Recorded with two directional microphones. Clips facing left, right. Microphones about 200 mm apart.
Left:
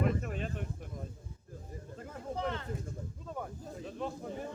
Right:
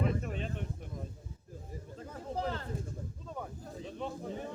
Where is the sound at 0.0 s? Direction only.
Centre (ahead or behind).